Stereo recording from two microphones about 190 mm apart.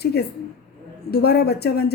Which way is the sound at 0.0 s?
55° left (ahead or behind).